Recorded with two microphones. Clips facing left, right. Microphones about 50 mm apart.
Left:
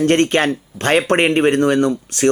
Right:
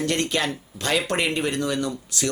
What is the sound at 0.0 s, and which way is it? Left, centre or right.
Speech, left.